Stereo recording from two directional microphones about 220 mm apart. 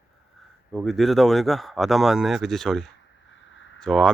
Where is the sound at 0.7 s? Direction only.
Centre (ahead or behind).